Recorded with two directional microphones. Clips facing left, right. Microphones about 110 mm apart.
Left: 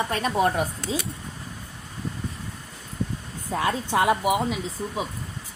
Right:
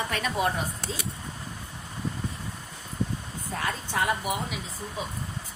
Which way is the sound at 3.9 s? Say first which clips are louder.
Left 6 dB; 90° left.